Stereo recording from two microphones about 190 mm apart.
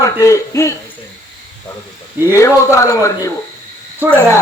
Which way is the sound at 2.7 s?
15° left (ahead or behind).